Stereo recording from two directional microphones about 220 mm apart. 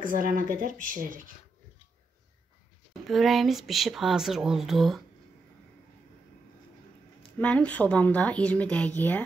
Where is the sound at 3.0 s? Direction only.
Centre (ahead or behind).